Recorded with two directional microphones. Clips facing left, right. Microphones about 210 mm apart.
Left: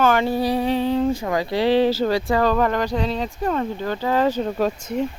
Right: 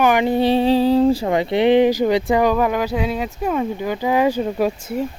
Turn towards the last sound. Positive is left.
turn(degrees=-5)  # may be behind; listen again after turning